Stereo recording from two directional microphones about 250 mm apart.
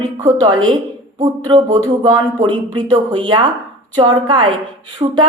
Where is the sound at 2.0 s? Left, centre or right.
Centre.